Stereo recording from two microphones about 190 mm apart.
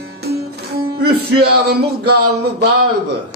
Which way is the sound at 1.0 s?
55° right (ahead or behind).